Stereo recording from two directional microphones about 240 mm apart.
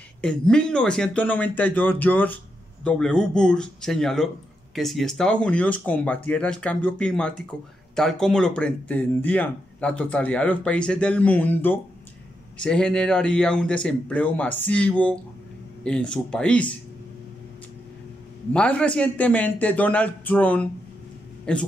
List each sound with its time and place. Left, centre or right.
0.2 s speech: centre
18.5 s a man's voice: centre